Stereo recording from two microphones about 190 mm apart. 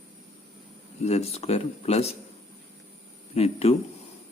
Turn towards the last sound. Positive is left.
turn(degrees=35)  # may be behind; listen again after turning